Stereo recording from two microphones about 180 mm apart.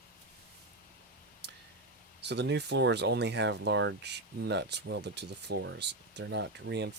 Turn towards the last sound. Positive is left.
turn(degrees=-75)  # may be behind; listen again after turning